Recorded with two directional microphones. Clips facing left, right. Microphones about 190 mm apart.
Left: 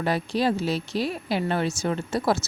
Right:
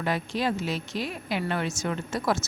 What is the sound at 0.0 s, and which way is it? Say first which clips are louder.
Speech: left 4 dB; 35° left (ahead or behind).